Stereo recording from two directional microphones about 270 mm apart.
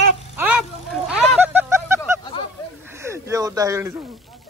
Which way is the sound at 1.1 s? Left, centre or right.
Centre.